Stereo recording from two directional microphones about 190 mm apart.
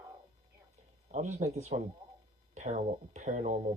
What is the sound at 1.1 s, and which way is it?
Speech, 35° right (ahead or behind).